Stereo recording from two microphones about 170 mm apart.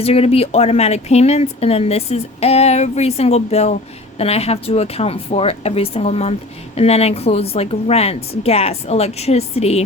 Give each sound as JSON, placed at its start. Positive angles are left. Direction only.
{"t": 0.0, "sound": "speech", "side_deg": 35}